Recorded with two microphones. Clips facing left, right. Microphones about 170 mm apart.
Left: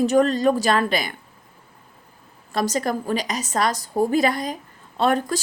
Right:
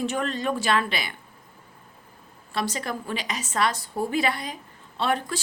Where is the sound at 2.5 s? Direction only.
40° left (ahead or behind).